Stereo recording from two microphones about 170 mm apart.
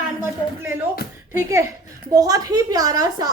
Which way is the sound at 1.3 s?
15° right (ahead or behind).